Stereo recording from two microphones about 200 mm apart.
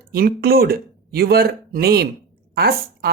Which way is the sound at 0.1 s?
50° right (ahead or behind).